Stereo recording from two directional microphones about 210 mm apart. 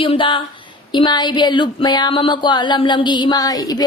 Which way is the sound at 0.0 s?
25° left (ahead or behind).